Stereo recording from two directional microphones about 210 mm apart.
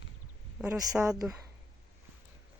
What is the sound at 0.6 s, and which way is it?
Speech, 5° right (ahead or behind).